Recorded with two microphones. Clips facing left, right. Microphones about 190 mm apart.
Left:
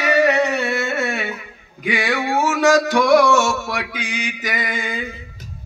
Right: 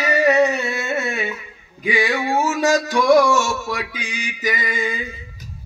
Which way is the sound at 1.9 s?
65° left (ahead or behind).